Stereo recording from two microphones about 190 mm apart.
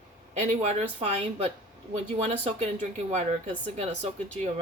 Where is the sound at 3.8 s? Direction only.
35° right (ahead or behind).